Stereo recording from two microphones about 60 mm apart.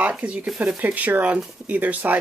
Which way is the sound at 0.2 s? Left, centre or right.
Right.